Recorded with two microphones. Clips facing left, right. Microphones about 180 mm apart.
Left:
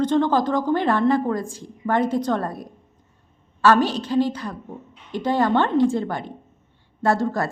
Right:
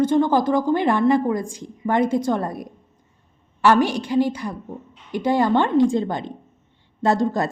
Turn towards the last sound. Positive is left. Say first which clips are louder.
# right 1 dB
turn(degrees=-20)  # may be behind; listen again after turning